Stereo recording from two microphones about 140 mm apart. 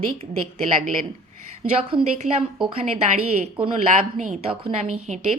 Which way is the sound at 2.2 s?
5° right (ahead or behind).